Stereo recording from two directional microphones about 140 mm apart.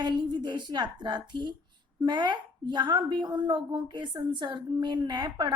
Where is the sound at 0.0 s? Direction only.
35° right (ahead or behind).